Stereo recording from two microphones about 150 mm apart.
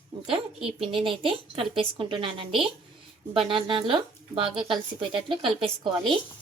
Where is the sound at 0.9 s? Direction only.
35° right (ahead or behind).